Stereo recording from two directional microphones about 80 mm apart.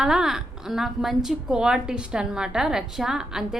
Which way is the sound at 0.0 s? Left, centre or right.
Centre.